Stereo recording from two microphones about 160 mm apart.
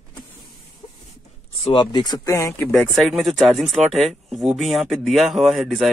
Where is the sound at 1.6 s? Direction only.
30° left (ahead or behind).